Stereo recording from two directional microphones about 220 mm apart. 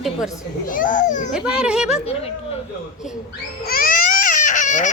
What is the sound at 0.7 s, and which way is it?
Speech, 40° left (ahead or behind).